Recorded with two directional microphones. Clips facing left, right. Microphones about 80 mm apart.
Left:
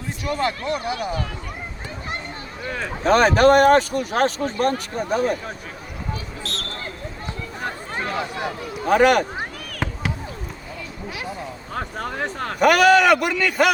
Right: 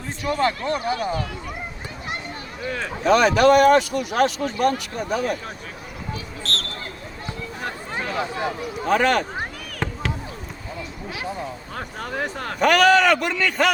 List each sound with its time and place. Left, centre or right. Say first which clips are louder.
0.3 s speech: right 2 dB; right
3.0 s speech: left 1 dB; left
6.4 s a sound: right 2 dB; centre
8.3 s speech: right 1 dB; right
8.9 s speech: left 4 dB; centre
9.8 s a sound: even; centre
12.5 s a man's voice: left 1 dB; centre